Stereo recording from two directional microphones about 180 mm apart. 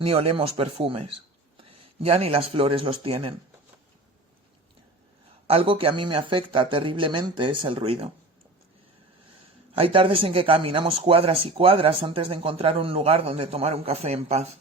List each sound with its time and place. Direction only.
0.0 s speech: 30° right (ahead or behind)
5.5 s speech: 30° right (ahead or behind)
9.7 s speech: 30° right (ahead or behind)